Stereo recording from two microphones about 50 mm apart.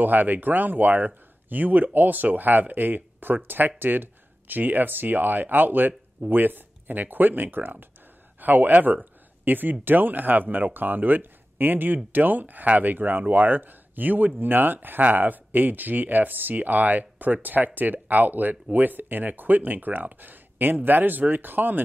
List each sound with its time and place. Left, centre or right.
0.0 s speech: right